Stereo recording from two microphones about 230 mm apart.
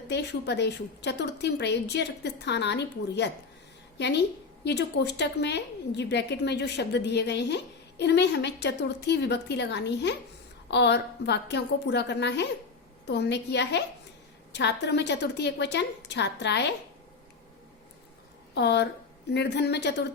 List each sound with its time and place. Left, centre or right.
0.1 s a woman's voice: left
18.5 s a woman's voice: left